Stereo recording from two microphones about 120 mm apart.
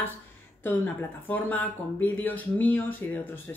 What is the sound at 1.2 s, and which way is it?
Speech, 15° left (ahead or behind).